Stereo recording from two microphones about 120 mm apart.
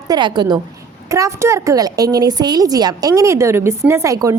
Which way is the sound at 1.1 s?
25° right (ahead or behind).